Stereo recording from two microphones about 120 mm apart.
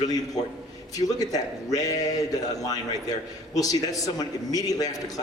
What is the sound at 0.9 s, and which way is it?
A man's voice, 30° left (ahead or behind).